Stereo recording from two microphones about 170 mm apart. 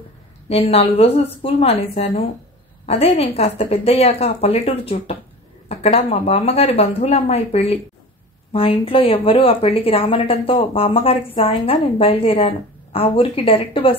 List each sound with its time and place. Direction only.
0.5 s a woman's voice: 35° left (ahead or behind)